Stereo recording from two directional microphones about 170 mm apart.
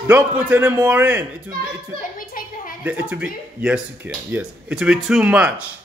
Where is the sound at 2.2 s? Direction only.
55° left (ahead or behind).